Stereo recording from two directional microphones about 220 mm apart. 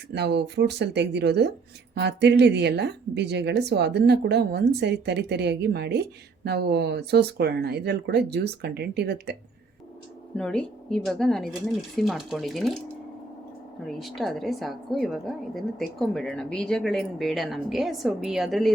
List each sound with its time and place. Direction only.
0.1 s a woman's voice: 50° right (ahead or behind)
10.3 s a woman's voice: 5° left (ahead or behind)
13.8 s a woman's voice: centre (ahead or behind)